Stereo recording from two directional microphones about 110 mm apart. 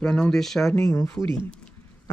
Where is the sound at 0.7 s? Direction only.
25° left (ahead or behind).